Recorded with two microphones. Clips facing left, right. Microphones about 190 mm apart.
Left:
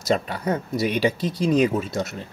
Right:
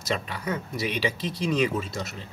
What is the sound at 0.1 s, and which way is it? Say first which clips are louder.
Speech: left 6 dB; 45° left (ahead or behind).